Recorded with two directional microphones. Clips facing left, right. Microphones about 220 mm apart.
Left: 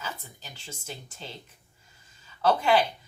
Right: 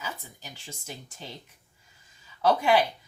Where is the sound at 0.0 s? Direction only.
15° right (ahead or behind).